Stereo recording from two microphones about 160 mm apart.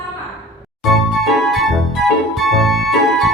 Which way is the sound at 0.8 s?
Centre (ahead or behind).